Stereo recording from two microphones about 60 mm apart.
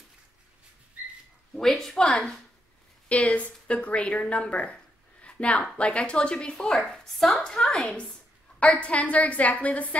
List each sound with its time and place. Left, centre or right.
1.5 s speech: centre
3.1 s a woman's voice: left